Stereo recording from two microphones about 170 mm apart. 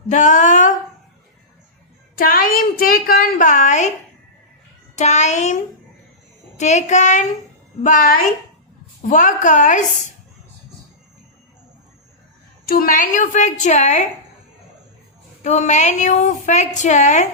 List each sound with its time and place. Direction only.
0.1 s a woman's voice: 45° left (ahead or behind)
2.1 s a woman's voice: 60° left (ahead or behind)
4.9 s a woman's voice: 45° left (ahead or behind)
6.6 s a woman's voice: 45° left (ahead or behind)
12.6 s a woman's voice: 60° left (ahead or behind)
15.4 s a woman's voice: 45° left (ahead or behind)